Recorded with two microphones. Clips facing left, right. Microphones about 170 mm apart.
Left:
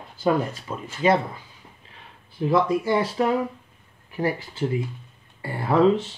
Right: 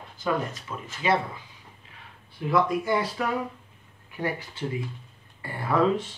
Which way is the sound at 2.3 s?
30° left (ahead or behind).